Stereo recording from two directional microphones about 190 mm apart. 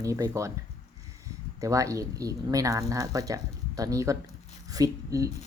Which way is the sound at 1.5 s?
15° right (ahead or behind).